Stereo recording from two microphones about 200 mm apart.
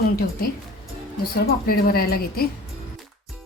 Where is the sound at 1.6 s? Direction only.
50° left (ahead or behind).